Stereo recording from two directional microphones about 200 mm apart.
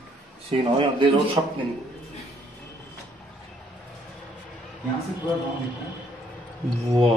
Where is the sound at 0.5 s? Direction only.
25° right (ahead or behind).